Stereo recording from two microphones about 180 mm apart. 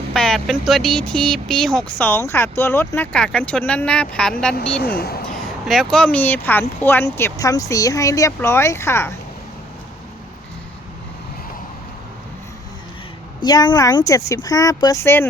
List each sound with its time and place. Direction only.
0.1 s speech: centre (ahead or behind)
4.8 s speech: 60° left (ahead or behind)
5.6 s speech: centre (ahead or behind)
13.4 s speech: 25° left (ahead or behind)